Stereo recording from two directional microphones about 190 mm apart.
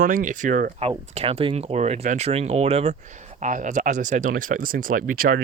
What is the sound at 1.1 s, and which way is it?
Speech, 30° right (ahead or behind).